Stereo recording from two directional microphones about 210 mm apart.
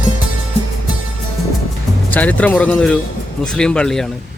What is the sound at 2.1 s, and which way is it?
Speech, 5° left (ahead or behind).